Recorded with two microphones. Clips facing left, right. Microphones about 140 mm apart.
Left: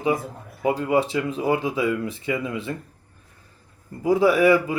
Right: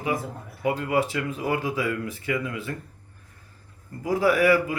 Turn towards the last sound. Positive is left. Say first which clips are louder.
# left 3 dB
turn(degrees=25)  # may be behind; listen again after turning